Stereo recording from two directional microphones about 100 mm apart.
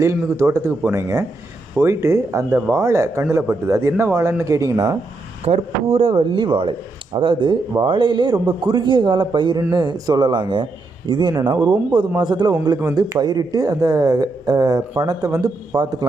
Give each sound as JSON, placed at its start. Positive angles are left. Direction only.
{"t": 0.0, "sound": "speech", "side_deg": -30}
{"t": 5.5, "sound": "a man's voice", "side_deg": -90}